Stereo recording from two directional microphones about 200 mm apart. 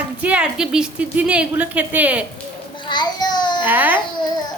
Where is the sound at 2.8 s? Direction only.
20° left (ahead or behind).